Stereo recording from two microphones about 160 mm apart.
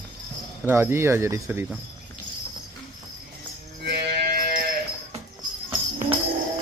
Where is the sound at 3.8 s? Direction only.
85° right.